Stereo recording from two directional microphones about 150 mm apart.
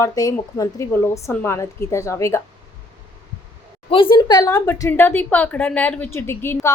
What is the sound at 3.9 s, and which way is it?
A woman's voice, 35° left (ahead or behind).